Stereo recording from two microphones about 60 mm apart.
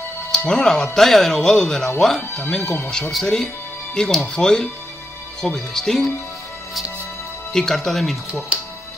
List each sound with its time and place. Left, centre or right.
0.5 s speech: centre
7.5 s speech: centre